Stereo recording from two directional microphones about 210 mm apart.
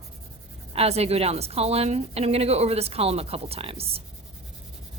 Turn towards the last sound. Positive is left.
turn(degrees=-25)  # may be behind; listen again after turning